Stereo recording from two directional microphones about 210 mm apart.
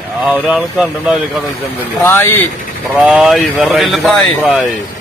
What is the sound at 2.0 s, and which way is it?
Speech, 10° left (ahead or behind).